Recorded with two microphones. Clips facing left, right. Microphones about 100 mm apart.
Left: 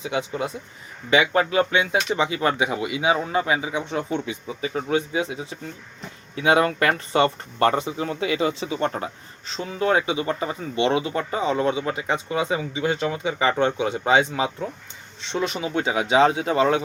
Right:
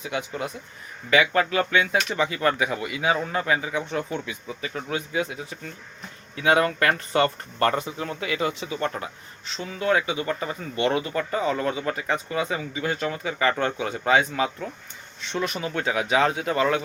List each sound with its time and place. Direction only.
0.0 s speech: 25° left (ahead or behind)